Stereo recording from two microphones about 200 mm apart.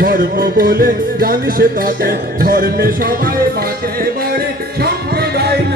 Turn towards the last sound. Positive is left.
turn(degrees=-55)  # may be behind; listen again after turning